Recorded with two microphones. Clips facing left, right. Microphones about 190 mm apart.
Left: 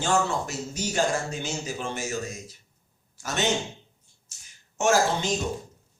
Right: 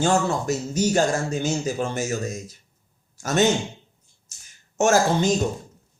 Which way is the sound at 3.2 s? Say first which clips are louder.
Right 8 dB; 45° right (ahead or behind).